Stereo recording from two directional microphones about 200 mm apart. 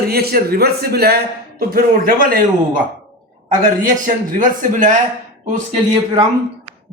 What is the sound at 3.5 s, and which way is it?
Speech, 40° right (ahead or behind).